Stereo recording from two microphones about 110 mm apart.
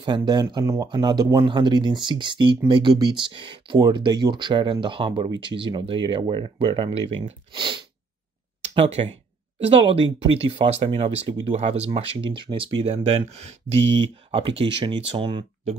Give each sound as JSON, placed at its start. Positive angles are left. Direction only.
{"t": 0.0, "sound": "speech", "side_deg": -45}
{"t": 7.5, "sound": "sneeze", "side_deg": -45}
{"t": 8.7, "sound": "speech", "side_deg": -65}
{"t": 9.7, "sound": "speech", "side_deg": -55}
{"t": 12.8, "sound": "speech", "side_deg": -75}
{"t": 14.3, "sound": "speech", "side_deg": -55}